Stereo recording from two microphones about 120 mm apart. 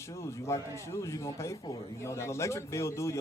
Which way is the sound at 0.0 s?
25° left (ahead or behind).